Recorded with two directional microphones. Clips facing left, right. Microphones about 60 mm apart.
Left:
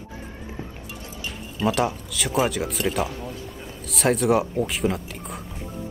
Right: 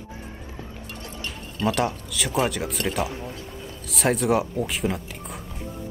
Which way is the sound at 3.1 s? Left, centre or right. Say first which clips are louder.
Even; right.